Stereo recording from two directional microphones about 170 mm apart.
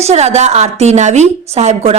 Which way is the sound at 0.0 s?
40° right (ahead or behind).